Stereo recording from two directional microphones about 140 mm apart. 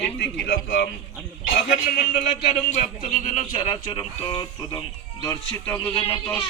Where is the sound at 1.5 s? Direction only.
75° left (ahead or behind); by 2.8 s 55° left (ahead or behind).